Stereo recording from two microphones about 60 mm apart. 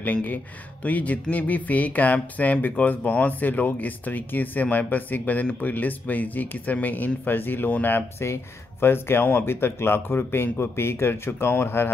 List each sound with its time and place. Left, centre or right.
0.0 s speech: left